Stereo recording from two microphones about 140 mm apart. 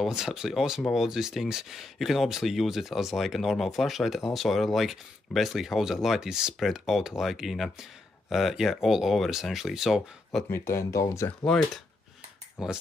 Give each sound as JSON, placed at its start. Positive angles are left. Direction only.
{"t": 0.0, "sound": "speech", "side_deg": -5}
{"t": 10.5, "sound": "speech", "side_deg": 20}
{"t": 11.4, "sound": "speech", "side_deg": 5}